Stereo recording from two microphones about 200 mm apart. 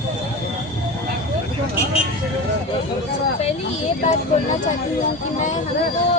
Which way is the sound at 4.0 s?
35° left (ahead or behind).